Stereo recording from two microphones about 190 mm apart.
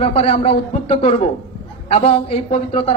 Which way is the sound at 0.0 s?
30° left (ahead or behind).